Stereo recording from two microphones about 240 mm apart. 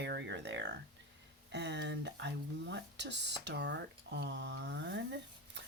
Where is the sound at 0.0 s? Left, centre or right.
Right.